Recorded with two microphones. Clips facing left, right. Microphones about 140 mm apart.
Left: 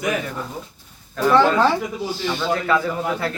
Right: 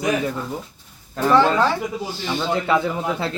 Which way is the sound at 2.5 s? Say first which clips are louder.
Right 1 dB; 20° right (ahead or behind).